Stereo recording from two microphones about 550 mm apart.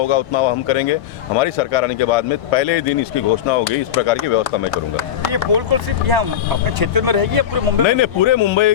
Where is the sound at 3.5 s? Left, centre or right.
Left.